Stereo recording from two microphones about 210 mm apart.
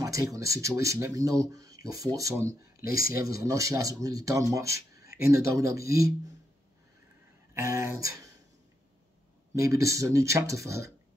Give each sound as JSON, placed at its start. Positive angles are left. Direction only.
{"t": 0.0, "sound": "speech", "side_deg": -15}
{"t": 7.5, "sound": "speech", "side_deg": -15}
{"t": 9.6, "sound": "speech", "side_deg": -15}